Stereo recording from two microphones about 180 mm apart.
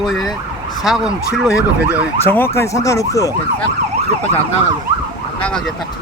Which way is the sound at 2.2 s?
10° left (ahead or behind).